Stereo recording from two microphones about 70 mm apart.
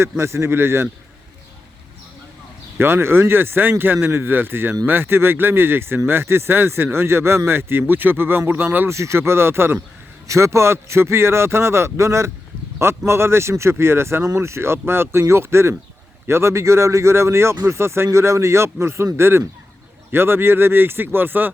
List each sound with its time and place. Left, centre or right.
0.0 s speech: right
2.7 s speech: right
8.9 s speech: right